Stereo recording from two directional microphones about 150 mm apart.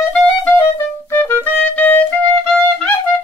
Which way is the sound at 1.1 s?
15° left (ahead or behind).